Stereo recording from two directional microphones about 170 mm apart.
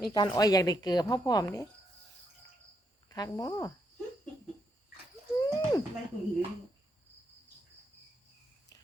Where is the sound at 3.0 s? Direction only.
20° left (ahead or behind).